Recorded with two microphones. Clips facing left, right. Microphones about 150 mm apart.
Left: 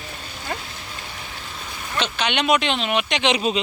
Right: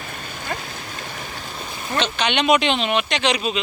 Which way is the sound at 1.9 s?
5° left (ahead or behind).